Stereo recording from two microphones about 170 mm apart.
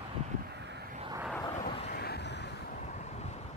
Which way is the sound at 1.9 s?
70° left (ahead or behind).